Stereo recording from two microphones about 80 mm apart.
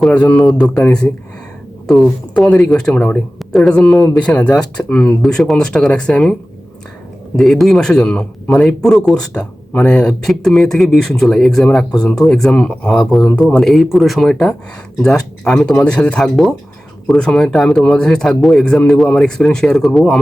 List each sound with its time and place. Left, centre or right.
0.1 s a man's voice: centre
3.3 s a man's voice: centre
5.2 s a man's voice: centre
7.3 s a man's voice: centre